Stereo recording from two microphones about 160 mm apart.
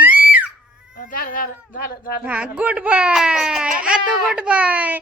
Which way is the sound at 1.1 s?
60° left (ahead or behind).